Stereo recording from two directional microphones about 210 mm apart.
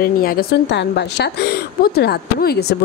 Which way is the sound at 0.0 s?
45° left (ahead or behind).